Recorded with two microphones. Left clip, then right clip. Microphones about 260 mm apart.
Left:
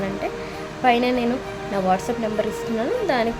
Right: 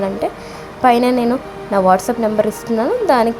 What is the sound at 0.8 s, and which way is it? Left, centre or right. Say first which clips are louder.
A woman's voice: right 6 dB; centre.